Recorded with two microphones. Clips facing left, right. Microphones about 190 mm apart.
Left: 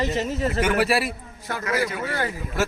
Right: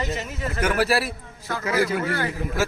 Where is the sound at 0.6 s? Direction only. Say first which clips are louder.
Right 1 dB; centre (ahead or behind).